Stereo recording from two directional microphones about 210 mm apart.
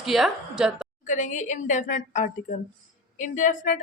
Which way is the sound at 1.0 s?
35° left (ahead or behind).